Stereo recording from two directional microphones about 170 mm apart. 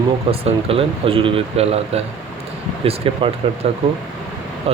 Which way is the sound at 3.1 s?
35° right (ahead or behind).